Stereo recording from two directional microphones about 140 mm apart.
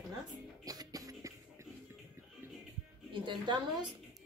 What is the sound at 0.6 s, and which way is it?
Music, 25° right (ahead or behind).